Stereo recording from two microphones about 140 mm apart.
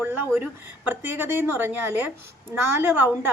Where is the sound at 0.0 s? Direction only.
15° right (ahead or behind).